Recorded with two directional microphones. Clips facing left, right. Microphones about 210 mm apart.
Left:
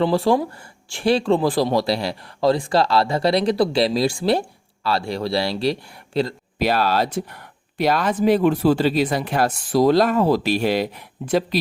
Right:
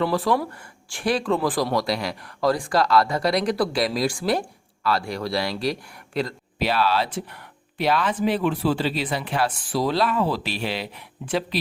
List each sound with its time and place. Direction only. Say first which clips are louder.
0.0 s a man's voice: left 4 dB; 25° left (ahead or behind)
6.6 s speech: left 3 dB; 45° left (ahead or behind)